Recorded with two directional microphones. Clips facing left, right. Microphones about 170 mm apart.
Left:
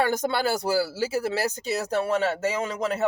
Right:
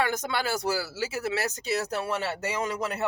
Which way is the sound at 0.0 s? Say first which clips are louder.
Left 4 dB; 35° left (ahead or behind).